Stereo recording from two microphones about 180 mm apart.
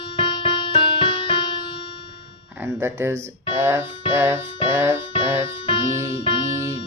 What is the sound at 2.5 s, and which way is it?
Speech, 10° right (ahead or behind).